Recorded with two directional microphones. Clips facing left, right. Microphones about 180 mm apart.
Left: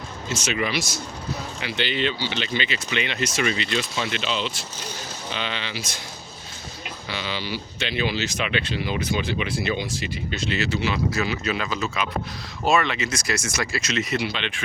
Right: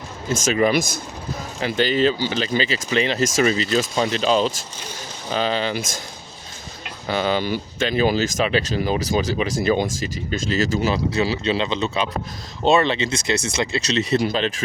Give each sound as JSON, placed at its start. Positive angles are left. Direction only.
{"t": 0.3, "sound": "speech", "side_deg": -45}
{"t": 7.1, "sound": "speech", "side_deg": -45}